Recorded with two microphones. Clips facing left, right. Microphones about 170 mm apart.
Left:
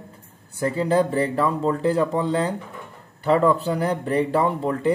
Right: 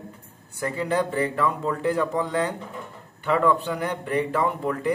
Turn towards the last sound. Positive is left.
turn(degrees=30)  # may be behind; listen again after turning